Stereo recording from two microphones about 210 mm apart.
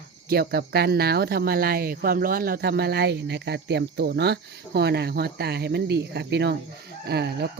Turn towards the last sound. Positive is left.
turn(degrees=-50)  # may be behind; listen again after turning